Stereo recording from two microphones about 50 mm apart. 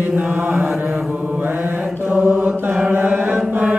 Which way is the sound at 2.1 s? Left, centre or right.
Right.